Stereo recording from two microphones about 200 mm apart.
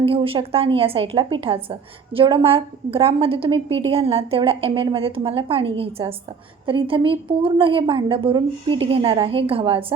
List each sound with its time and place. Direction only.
0.0 s a woman's voice: 25° right (ahead or behind)